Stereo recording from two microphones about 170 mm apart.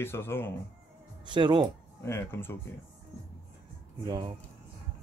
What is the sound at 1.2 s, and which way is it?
Speech, 25° right (ahead or behind).